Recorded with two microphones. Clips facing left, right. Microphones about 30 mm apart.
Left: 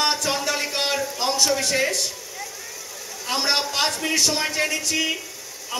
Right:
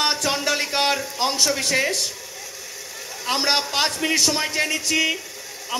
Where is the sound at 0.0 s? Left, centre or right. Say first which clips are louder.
Right 1 dB; centre.